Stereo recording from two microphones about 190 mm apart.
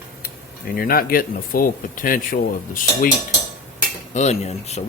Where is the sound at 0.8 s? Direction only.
50° left (ahead or behind).